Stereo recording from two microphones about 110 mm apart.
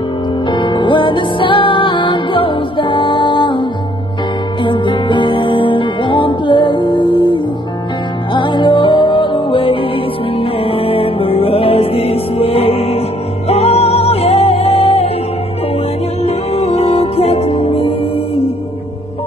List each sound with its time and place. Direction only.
0.5 s music: 45° left (ahead or behind)
4.6 s music: 45° left (ahead or behind); by 15.0 s 65° left (ahead or behind)
16.2 s music: 70° left (ahead or behind)